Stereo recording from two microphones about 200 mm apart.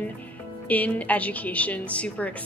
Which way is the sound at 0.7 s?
5° left (ahead or behind).